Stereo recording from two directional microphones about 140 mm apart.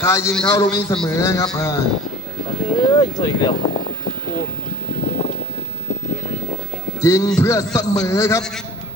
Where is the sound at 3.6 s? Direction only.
45° left (ahead or behind).